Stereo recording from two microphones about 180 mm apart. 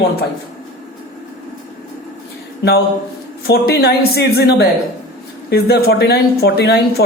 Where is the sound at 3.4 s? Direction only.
60° left (ahead or behind).